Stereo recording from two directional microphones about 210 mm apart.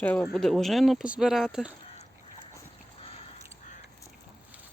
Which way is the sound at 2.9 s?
25° left (ahead or behind).